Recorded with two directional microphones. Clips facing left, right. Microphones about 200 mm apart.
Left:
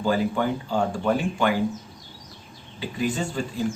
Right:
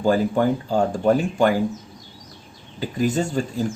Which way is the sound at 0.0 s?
45° right (ahead or behind).